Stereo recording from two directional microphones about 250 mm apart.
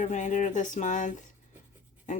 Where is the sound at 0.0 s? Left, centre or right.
Left.